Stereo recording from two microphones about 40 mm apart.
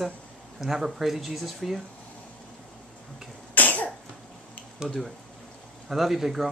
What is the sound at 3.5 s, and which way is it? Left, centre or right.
Cough, left.